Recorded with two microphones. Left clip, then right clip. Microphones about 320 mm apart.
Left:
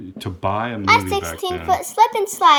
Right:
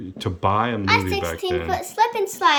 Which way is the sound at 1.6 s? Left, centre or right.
Left.